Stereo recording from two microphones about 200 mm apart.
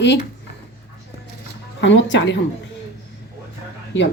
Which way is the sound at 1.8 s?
65° left (ahead or behind).